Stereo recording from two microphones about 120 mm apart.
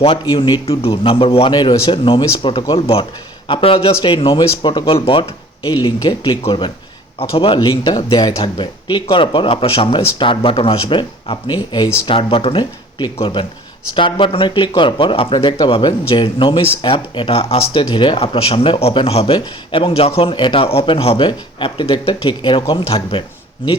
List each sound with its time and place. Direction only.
0.3 s speech: 35° left (ahead or behind)
0.6 s speech: 50° left (ahead or behind)
5.6 s speech: 30° left (ahead or behind)
7.2 s speech: 50° left (ahead or behind)
7.6 s speech: 35° left (ahead or behind)